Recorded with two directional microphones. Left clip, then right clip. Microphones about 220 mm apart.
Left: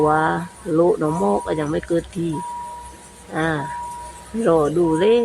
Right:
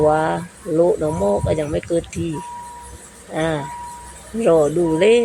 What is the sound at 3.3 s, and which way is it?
Speech, 5° left (ahead or behind).